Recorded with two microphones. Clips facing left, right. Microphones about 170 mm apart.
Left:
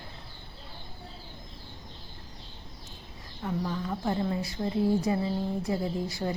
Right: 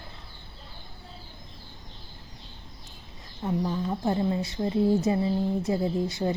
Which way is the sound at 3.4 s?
25° right (ahead or behind).